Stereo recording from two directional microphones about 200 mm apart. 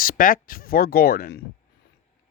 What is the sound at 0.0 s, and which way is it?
Speech, 45° left (ahead or behind).